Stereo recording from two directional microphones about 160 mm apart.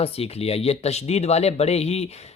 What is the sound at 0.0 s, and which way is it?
Speech, 40° left (ahead or behind).